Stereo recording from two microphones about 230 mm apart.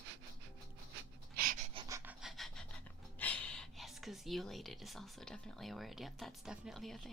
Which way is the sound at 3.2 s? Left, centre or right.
Centre.